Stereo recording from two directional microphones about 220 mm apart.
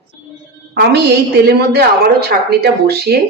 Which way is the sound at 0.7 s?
45° right (ahead or behind).